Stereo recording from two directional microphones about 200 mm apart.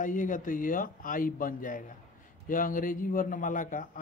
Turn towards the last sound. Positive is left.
turn(degrees=40)  # may be behind; listen again after turning